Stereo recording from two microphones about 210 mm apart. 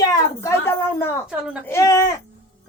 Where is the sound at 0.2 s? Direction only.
10° left (ahead or behind).